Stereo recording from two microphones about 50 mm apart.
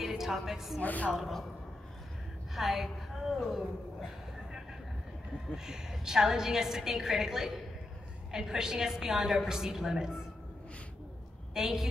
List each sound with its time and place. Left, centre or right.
0.0 s a woman's voice: centre
0.7 s a woman's voice: left
1.1 s speech: centre
2.5 s speech: centre
5.7 s a woman's voice: centre
11.5 s a woman's voice: centre